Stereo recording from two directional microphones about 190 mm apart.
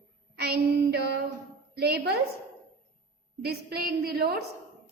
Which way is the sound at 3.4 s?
55° right (ahead or behind).